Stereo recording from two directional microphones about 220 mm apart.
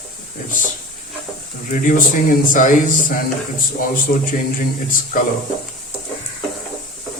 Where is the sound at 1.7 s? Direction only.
40° left (ahead or behind).